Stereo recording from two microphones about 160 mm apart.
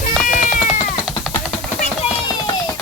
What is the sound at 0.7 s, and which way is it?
Cat, centre (ahead or behind).